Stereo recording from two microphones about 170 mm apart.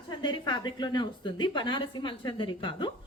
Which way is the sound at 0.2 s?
25° left (ahead or behind).